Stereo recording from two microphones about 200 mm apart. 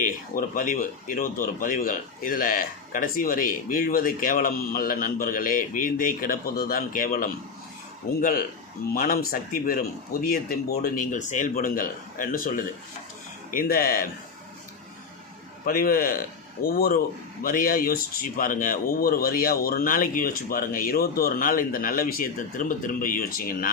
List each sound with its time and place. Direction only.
0.0 s speech: 45° left (ahead or behind)
15.6 s speech: 45° left (ahead or behind)